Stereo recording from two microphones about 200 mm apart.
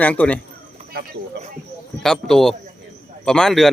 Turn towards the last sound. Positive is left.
turn(degrees=0)  # may be behind; listen again after turning